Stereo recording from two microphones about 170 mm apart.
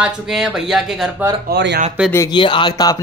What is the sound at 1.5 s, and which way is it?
Speech, 80° right.